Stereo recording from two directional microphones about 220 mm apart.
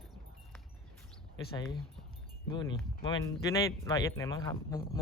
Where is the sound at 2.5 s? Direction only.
20° left (ahead or behind).